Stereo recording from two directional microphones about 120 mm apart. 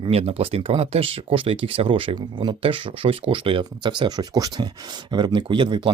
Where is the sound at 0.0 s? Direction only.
55° right (ahead or behind).